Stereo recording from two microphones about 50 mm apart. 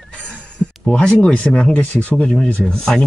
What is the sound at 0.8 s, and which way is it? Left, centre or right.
Speech, left.